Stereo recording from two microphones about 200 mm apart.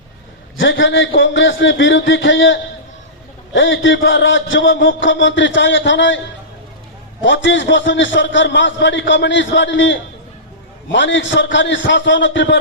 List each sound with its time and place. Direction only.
0.5 s a man's voice: 70° left (ahead or behind)
7.2 s a man's voice: 65° left (ahead or behind)